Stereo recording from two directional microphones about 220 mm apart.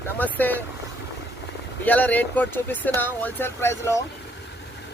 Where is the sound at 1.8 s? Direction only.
5° left (ahead or behind).